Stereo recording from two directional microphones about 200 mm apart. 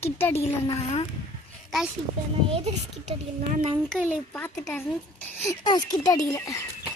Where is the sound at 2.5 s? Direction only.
35° right (ahead or behind).